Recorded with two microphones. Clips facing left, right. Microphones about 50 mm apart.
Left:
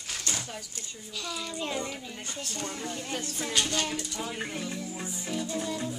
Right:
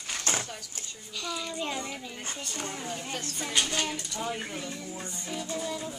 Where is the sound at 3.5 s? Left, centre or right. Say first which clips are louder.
Even; centre.